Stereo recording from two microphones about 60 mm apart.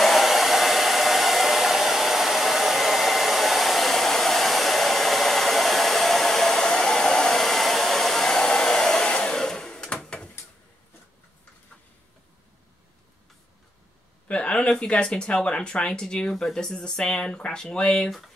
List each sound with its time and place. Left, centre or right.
0.0 s hair dryer: centre
9.9 s drawer open or close: centre
14.2 s speech: left